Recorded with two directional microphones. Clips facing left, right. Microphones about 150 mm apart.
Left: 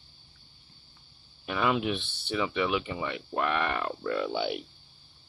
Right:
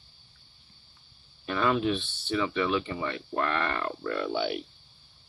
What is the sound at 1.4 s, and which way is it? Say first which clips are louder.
Speech: right 2 dB; 10° left (ahead or behind).